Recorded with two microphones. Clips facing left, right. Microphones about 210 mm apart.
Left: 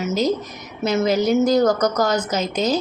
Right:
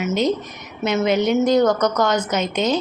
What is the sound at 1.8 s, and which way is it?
Speech, 35° left (ahead or behind).